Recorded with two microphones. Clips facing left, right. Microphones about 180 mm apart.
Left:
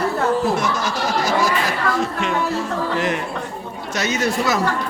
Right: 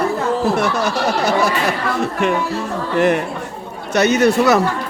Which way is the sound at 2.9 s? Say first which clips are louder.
Right 6 dB; 60° right (ahead or behind).